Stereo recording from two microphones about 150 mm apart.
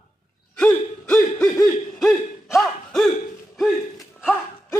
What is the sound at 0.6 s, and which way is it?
Hoot, 10° left (ahead or behind).